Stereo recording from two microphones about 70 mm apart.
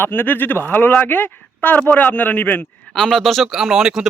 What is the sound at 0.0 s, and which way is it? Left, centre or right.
Speech, left.